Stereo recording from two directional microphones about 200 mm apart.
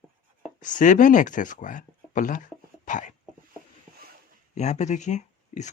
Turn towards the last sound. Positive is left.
turn(degrees=35)  # may be behind; listen again after turning